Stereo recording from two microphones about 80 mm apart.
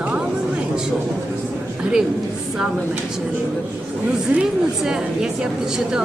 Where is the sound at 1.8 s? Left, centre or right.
Centre.